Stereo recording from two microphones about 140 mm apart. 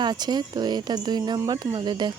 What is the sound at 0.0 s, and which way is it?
Speech, 30° right (ahead or behind).